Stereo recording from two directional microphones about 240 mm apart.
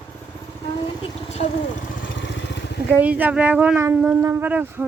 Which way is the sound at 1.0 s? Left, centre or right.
Left.